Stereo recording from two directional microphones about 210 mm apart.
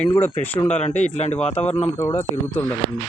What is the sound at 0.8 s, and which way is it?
Speech, 35° left (ahead or behind).